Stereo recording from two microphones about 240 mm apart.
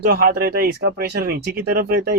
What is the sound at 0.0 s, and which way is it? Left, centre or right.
Speech, right.